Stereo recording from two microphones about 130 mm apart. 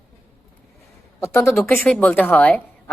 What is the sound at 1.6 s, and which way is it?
A woman's voice, 15° left (ahead or behind).